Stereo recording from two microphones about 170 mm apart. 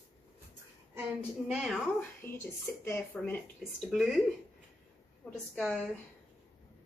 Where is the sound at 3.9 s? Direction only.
Centre (ahead or behind).